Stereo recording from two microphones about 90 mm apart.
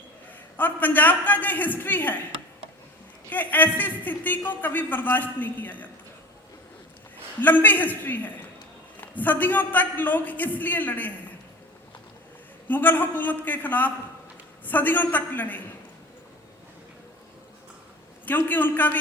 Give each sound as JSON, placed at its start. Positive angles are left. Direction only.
{"t": 0.5, "sound": "a man's voice", "side_deg": 20}
{"t": 3.2, "sound": "a man's voice", "side_deg": 20}
{"t": 7.4, "sound": "a man's voice", "side_deg": 20}
{"t": 12.6, "sound": "a man's voice", "side_deg": 20}
{"t": 18.3, "sound": "a man's voice", "side_deg": 20}